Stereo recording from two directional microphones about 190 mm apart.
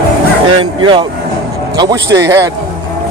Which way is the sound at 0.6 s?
25° right (ahead or behind).